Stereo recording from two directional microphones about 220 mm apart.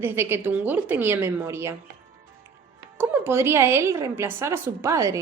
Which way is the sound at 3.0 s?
10° right (ahead or behind).